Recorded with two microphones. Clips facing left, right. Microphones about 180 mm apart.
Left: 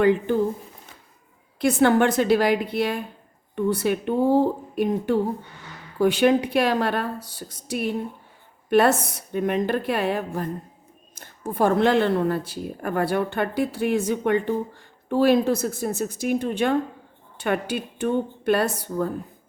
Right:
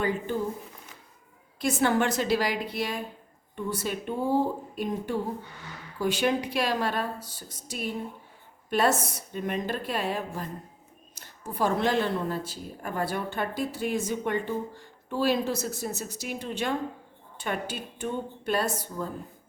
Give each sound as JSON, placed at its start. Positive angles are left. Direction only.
{"t": 0.0, "sound": "speech", "side_deg": 70}
{"t": 1.5, "sound": "speech", "side_deg": 60}